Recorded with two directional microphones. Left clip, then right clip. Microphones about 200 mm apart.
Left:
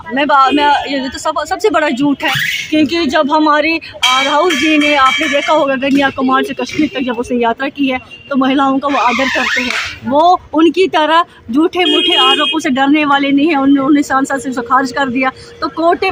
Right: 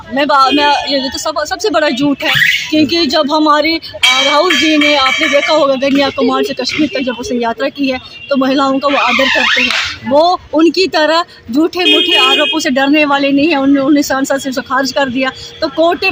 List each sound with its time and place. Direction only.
0.2 s speech: 5° left (ahead or behind)